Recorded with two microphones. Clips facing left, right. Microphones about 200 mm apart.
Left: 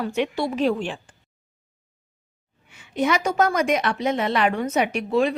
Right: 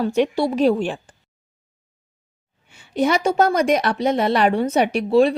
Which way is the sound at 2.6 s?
30° right (ahead or behind).